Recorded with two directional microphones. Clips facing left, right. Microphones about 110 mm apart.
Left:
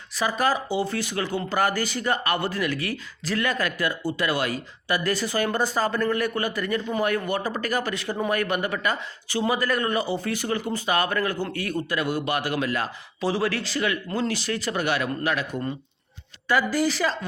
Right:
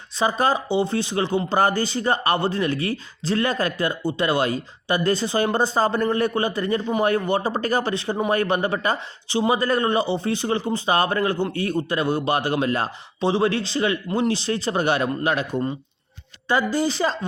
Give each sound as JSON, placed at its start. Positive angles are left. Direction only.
{"t": 0.2, "sound": "speech", "side_deg": -30}
{"t": 16.7, "sound": "speech", "side_deg": -30}